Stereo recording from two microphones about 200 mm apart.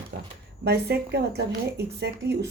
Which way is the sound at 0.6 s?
55° right (ahead or behind).